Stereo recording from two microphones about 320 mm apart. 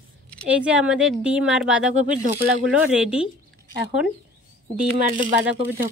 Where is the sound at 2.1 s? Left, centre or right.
Right.